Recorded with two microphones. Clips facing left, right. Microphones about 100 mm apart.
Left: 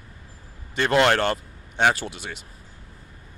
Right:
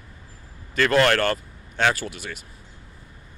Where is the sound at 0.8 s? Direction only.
20° left (ahead or behind).